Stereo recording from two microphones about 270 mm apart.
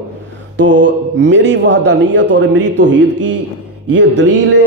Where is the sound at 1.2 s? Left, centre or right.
Right.